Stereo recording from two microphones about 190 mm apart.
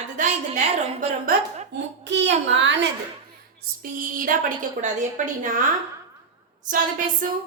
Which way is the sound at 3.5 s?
45° right (ahead or behind).